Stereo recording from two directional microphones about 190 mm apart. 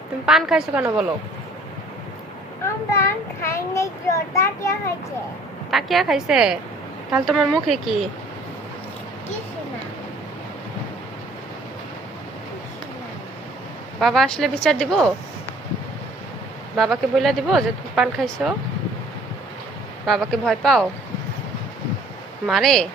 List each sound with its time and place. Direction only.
0.3 s speech: 5° right (ahead or behind)
2.9 s a child's voice: 15° left (ahead or behind)
5.7 s speech: centre (ahead or behind)
14.0 s speech: centre (ahead or behind)
16.7 s speech: centre (ahead or behind)
20.1 s speech: centre (ahead or behind)
22.4 s speech: centre (ahead or behind)